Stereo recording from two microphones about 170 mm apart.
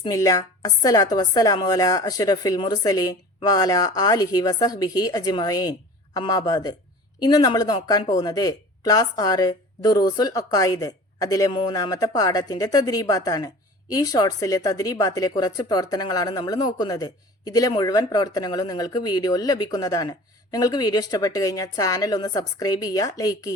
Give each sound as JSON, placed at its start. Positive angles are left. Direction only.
{"t": 0.0, "sound": "speech", "side_deg": 20}